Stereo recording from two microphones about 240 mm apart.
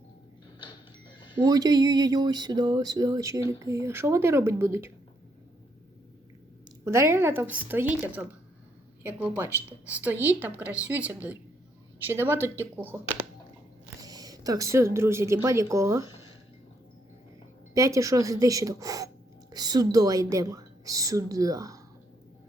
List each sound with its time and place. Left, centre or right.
1.5 s speech: centre
6.8 s speech: centre
14.0 s a woman's voice: centre
17.7 s speech: centre